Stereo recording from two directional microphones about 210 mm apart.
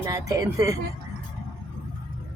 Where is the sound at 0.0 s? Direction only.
15° right (ahead or behind).